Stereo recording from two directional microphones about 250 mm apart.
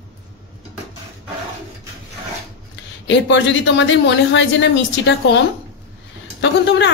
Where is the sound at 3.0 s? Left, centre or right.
Left.